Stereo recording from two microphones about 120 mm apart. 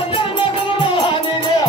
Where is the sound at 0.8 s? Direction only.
45° left (ahead or behind).